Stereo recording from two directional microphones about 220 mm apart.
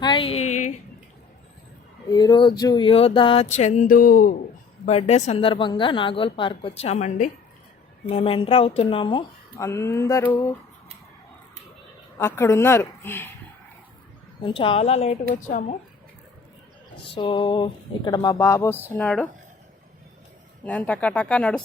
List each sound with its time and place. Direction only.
0.0 s a sound: 20° left (ahead or behind)
2.0 s speech: 20° left (ahead or behind); by 4.4 s 40° left (ahead or behind)
4.9 s speech: 30° left (ahead or behind)
12.1 s speech: 10° left (ahead or behind)
14.4 s a woman's voice: 25° left (ahead or behind)
17.2 s speech: 20° left (ahead or behind)
20.7 s speech: 5° left (ahead or behind)